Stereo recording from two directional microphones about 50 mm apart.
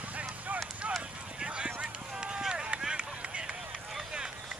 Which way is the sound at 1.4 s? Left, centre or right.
Centre.